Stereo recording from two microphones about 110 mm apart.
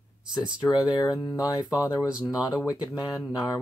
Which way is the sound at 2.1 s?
5° right (ahead or behind).